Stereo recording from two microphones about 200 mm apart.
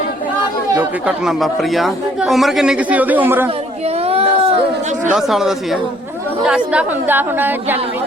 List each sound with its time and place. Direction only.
0.8 s speech: 5° right (ahead or behind)
4.0 s a sound: 30° right (ahead or behind)
5.1 s a woman's voice: centre (ahead or behind)